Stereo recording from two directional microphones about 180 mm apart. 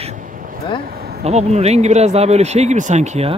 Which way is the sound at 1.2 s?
35° right (ahead or behind).